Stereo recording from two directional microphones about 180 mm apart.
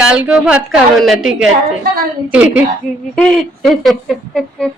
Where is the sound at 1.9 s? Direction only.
55° right (ahead or behind).